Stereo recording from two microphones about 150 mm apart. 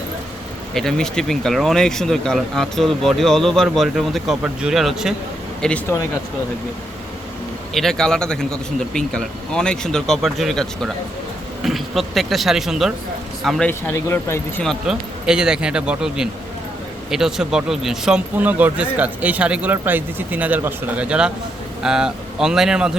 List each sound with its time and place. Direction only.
0.7 s speech: 5° left (ahead or behind)
7.7 s speech: centre (ahead or behind)
13.7 s speech: 15° left (ahead or behind)
14.6 s speech: centre (ahead or behind)